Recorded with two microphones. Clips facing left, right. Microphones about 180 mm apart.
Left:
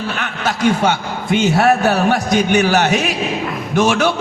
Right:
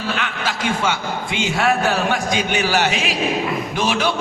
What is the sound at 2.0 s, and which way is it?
A man's voice, 45° left (ahead or behind).